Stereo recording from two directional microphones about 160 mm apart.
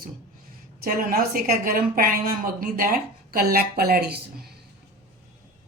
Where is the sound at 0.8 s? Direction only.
70° right (ahead or behind).